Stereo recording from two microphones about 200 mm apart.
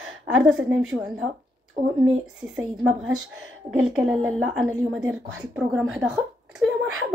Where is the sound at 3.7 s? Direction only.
5° right (ahead or behind).